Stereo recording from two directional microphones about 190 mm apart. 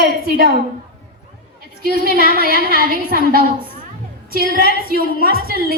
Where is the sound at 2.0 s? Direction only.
50° right (ahead or behind).